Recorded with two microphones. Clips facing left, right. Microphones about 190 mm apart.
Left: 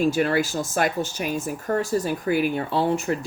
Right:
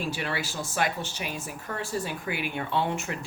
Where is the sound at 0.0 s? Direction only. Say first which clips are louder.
Left 11 dB; 45° left (ahead or behind).